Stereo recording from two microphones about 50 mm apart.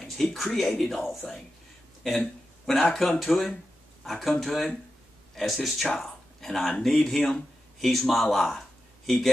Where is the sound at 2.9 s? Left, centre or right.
Centre.